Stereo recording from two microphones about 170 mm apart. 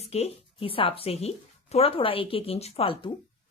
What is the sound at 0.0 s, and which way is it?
A woman's voice, 35° left (ahead or behind).